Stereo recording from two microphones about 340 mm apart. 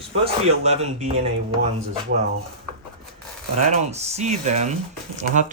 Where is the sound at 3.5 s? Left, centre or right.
Right.